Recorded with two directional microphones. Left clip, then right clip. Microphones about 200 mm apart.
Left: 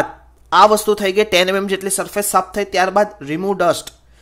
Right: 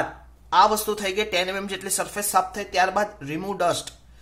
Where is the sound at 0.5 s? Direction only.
40° left (ahead or behind).